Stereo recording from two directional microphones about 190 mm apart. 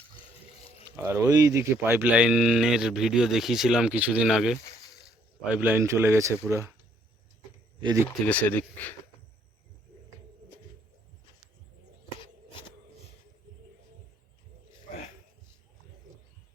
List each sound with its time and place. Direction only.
0.9 s speech: 15° right (ahead or behind)
7.8 s speech: 20° right (ahead or behind)
8.3 s speech: 10° left (ahead or behind)
12.2 s a sound: 25° left (ahead or behind)